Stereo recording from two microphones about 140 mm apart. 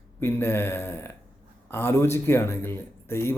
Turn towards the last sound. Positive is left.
turn(degrees=15)  # may be behind; listen again after turning